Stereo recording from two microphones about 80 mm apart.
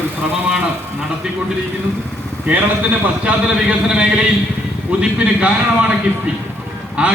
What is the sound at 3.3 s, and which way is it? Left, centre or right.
A man's voice, centre.